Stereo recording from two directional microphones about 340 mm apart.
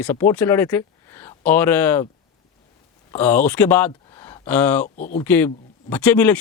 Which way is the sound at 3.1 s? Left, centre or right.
Centre.